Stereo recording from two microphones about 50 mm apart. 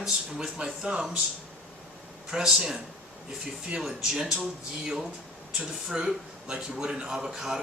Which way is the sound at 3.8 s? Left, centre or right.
Centre.